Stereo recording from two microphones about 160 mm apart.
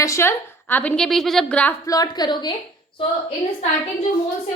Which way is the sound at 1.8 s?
25° left (ahead or behind).